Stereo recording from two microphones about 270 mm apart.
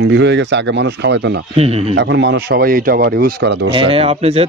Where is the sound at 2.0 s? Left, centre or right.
Right.